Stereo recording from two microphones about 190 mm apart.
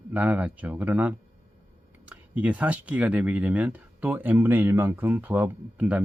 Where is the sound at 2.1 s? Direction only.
10° right (ahead or behind).